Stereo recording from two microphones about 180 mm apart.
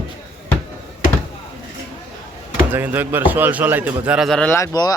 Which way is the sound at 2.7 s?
10° right (ahead or behind).